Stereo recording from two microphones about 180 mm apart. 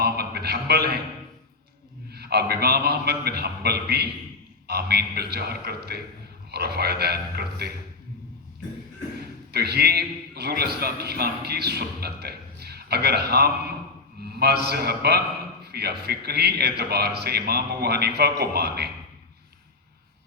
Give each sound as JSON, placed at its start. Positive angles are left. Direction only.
{"t": 0.0, "sound": "a sound", "side_deg": -60}
{"t": 2.1, "sound": "a man's voice", "side_deg": -60}
{"t": 9.5, "sound": "a man's voice", "side_deg": -65}